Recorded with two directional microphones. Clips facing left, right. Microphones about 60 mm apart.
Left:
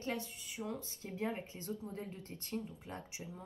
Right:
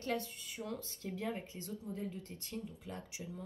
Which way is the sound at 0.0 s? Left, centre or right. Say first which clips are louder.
Right 2 dB; centre.